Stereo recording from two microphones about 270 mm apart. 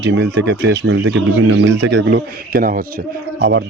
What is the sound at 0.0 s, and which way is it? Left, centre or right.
Speech, right.